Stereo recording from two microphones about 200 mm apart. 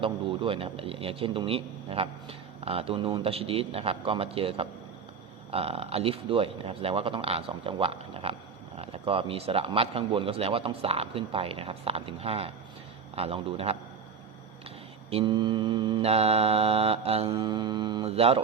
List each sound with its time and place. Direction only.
0.0 s speech: 25° right (ahead or behind)
15.1 s speech: 25° right (ahead or behind)